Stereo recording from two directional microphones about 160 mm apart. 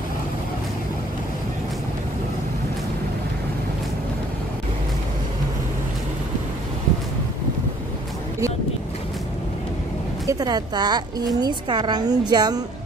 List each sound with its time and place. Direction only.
10.2 s a woman's voice: 25° right (ahead or behind)